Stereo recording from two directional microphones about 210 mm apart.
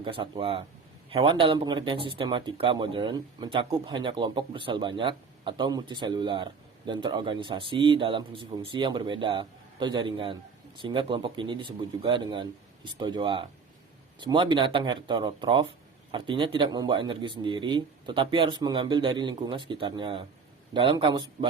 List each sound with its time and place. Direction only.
0.0 s speech: 25° right (ahead or behind)